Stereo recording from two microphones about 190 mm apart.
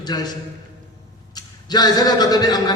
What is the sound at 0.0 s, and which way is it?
Speech, 20° left (ahead or behind).